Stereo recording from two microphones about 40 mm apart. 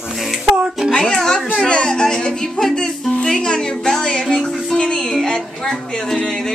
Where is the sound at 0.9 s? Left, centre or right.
Centre.